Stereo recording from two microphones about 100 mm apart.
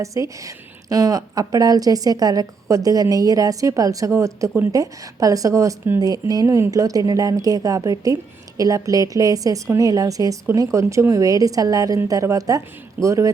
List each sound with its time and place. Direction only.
0.0 s a woman's voice: 35° right (ahead or behind)
6.0 s a woman's voice: 40° right (ahead or behind)